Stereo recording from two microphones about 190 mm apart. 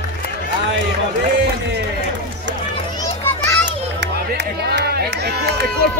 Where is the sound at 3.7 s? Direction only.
65° right (ahead or behind).